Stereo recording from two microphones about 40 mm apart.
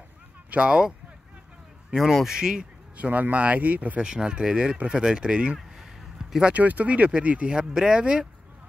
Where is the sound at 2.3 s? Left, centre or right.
Centre.